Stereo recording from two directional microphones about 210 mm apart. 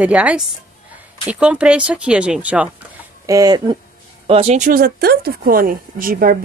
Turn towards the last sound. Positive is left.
turn(degrees=-45)  # may be behind; listen again after turning